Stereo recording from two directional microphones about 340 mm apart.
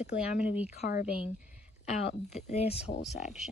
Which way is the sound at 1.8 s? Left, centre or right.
Centre.